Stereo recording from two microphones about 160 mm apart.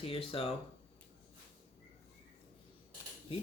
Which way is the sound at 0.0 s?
35° left (ahead or behind).